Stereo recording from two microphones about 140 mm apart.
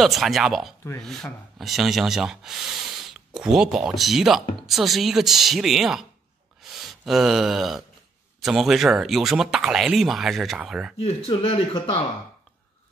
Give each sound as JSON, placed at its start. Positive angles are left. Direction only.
{"t": 0.0, "sound": "speech", "side_deg": 0}
{"t": 11.0, "sound": "speech", "side_deg": 45}